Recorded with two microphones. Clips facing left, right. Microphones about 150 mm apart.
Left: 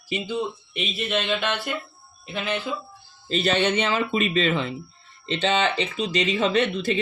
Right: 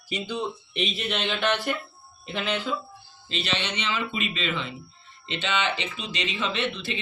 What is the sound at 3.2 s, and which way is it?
Speech, 45° left (ahead or behind).